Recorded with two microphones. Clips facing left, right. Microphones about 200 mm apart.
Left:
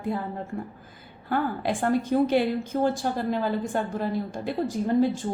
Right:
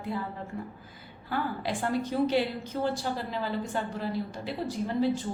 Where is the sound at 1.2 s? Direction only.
50° left (ahead or behind).